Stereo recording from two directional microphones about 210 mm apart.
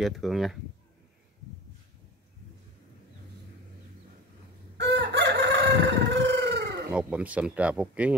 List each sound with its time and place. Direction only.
0.0 s speech: centre (ahead or behind)
4.7 s chicken: 55° right (ahead or behind)
6.9 s speech: 5° right (ahead or behind)